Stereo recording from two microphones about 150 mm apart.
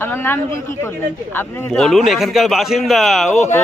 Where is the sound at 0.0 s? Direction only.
15° left (ahead or behind).